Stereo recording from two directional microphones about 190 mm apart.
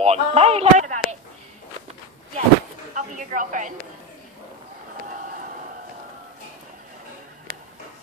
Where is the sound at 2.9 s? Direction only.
45° right (ahead or behind).